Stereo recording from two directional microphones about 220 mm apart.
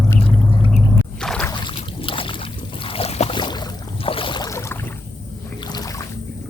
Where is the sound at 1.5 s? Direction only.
20° left (ahead or behind).